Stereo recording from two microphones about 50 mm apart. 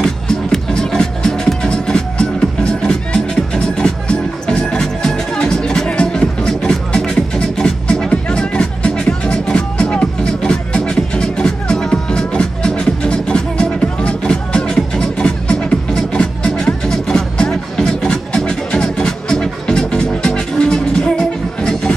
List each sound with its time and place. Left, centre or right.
0.0 s music: centre